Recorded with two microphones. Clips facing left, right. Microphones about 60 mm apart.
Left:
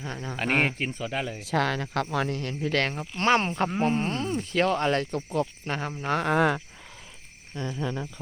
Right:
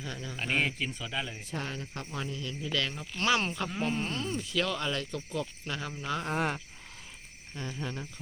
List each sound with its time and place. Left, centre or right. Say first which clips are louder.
0.0 s speech: left 5 dB; left
0.3 s speech: left 5 dB; left
1.4 s speech: left 11 dB; left
6.1 s speech: left 9 dB; left